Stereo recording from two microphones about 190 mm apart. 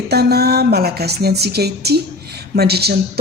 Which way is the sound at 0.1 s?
55° right (ahead or behind).